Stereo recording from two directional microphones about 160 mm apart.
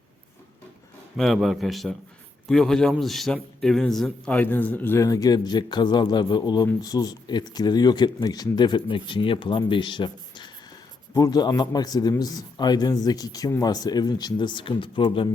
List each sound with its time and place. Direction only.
1.1 s a man's voice: centre (ahead or behind); by 15.3 s 30° left (ahead or behind)